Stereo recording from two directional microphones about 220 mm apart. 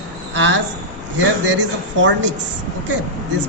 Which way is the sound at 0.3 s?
55° right (ahead or behind).